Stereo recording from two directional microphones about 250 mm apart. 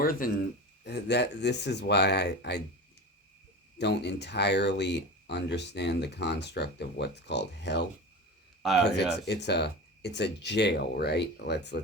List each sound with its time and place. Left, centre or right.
0.0 s speech: left
3.8 s speech: left